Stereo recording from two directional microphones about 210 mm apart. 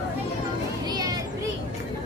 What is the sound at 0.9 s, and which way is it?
Children playing, 15° right (ahead or behind).